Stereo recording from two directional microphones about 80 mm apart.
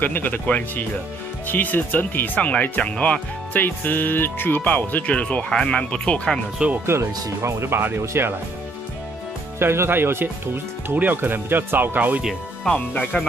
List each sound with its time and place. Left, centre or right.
0.0 s speech: left
6.9 s speech: right
9.6 s speech: right
12.6 s speech: centre